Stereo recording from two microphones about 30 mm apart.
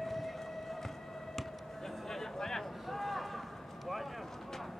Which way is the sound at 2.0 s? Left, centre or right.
Centre.